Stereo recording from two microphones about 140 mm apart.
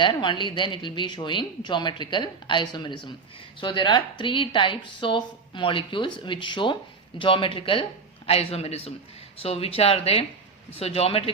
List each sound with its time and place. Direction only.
0.0 s speech: 35° left (ahead or behind)